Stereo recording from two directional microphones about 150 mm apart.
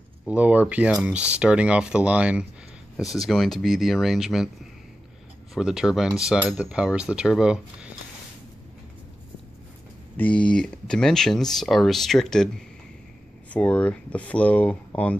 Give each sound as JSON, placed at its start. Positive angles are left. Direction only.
{"t": 0.3, "sound": "speech", "side_deg": -10}
{"t": 5.5, "sound": "speech", "side_deg": -5}
{"t": 10.1, "sound": "speech", "side_deg": 10}